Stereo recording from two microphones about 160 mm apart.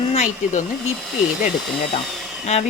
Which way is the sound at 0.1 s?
45° left (ahead or behind).